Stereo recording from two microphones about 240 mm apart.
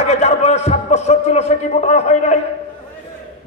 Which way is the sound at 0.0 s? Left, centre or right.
Left.